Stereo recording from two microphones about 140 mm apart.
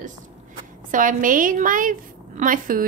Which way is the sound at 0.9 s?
70° right (ahead or behind).